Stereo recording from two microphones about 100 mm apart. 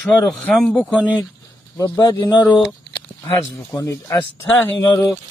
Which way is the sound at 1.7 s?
30° left (ahead or behind).